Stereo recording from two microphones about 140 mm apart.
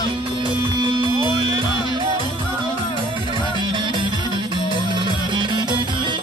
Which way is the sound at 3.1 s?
35° right (ahead or behind).